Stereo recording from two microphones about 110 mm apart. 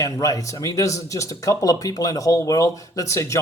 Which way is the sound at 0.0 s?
30° left (ahead or behind).